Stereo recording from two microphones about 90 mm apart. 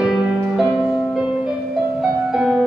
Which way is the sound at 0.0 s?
Centre (ahead or behind).